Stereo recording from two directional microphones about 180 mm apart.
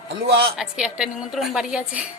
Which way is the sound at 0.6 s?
5° right (ahead or behind).